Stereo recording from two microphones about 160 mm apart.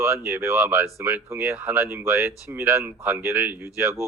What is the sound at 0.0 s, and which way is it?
Speech, 15° right (ahead or behind).